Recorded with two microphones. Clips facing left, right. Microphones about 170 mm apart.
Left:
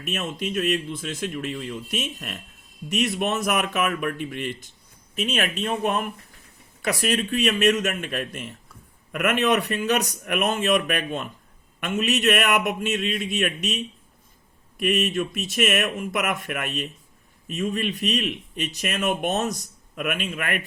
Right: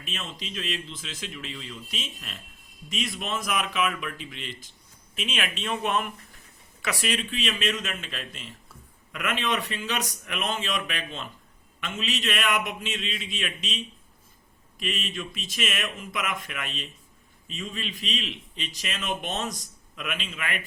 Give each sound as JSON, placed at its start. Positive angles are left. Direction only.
{"t": 0.0, "sound": "a man's voice", "side_deg": 50}